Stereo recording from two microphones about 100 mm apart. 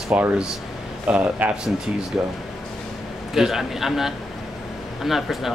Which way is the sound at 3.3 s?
5° right (ahead or behind).